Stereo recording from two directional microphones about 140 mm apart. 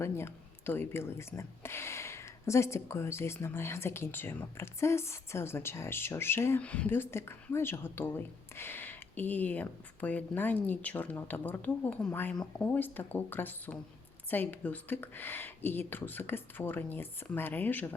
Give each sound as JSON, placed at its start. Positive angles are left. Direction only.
{"t": 0.0, "sound": "speech", "side_deg": 15}